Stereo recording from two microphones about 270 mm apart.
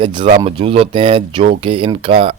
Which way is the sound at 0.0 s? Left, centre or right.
Centre.